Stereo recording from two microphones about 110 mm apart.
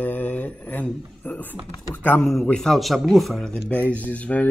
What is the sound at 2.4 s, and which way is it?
Speech, 5° left (ahead or behind).